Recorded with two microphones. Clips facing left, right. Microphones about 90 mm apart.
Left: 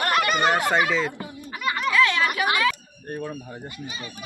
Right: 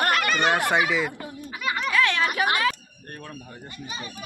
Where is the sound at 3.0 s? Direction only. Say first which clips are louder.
Left 9 dB; 10° left (ahead or behind).